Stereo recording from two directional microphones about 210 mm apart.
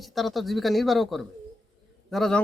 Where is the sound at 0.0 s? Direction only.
Centre (ahead or behind).